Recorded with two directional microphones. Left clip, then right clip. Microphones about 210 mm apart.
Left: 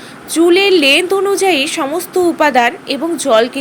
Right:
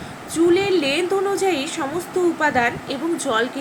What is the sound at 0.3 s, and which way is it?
A woman's voice, 45° left (ahead or behind).